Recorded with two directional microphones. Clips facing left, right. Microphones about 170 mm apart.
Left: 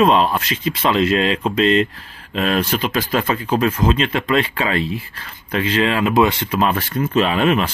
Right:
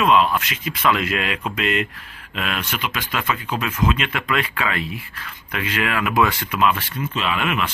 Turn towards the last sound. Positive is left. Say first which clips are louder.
# left 7 dB
turn(degrees=35)  # may be behind; listen again after turning